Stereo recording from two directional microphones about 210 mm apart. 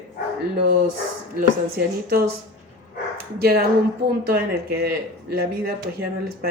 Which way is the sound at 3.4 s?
50° right (ahead or behind).